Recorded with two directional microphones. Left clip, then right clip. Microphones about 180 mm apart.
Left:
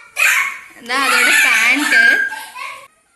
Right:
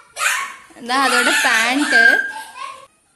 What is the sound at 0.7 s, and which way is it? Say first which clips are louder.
A woman's voice: left 1 dB; 60° right (ahead or behind).